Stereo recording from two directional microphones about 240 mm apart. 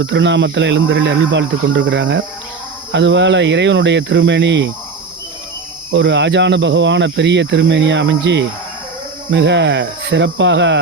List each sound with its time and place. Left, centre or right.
0.0 s speech: right
5.9 s speech: right